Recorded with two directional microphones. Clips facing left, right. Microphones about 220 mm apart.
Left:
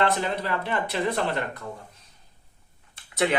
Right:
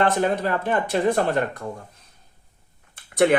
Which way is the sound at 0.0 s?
50° right (ahead or behind).